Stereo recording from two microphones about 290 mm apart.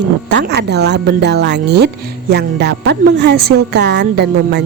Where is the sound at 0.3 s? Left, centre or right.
Right.